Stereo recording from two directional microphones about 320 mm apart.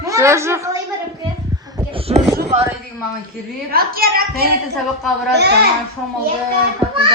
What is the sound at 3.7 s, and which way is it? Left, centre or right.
A woman's voice, right.